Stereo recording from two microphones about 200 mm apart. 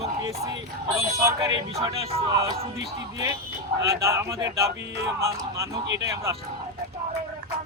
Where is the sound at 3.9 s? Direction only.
15° right (ahead or behind).